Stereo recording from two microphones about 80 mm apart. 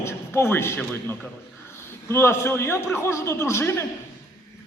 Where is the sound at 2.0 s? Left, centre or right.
Left.